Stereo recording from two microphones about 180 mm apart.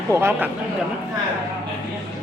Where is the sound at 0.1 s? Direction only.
15° right (ahead or behind).